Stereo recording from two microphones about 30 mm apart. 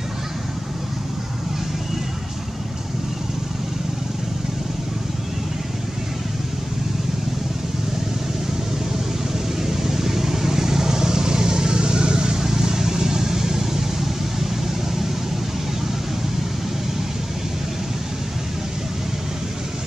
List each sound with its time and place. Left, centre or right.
9.6 s vehicle: centre